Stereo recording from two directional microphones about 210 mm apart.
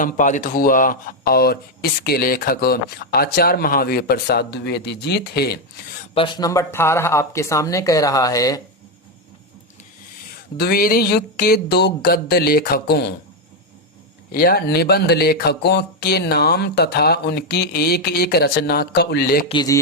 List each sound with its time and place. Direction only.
0.0 s speech: 35° left (ahead or behind)
6.1 s speech: 20° left (ahead or behind)
10.3 s speech: 45° left (ahead or behind)
14.3 s speech: 45° left (ahead or behind)
19.5 s speech: 20° left (ahead or behind)